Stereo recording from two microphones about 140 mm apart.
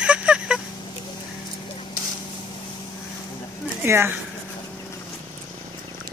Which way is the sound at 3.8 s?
15° right (ahead or behind).